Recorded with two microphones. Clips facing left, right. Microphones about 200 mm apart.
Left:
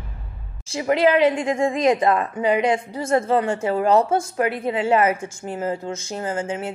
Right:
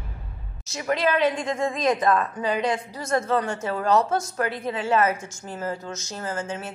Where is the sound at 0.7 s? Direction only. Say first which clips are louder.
Left 6 dB; 25° left (ahead or behind).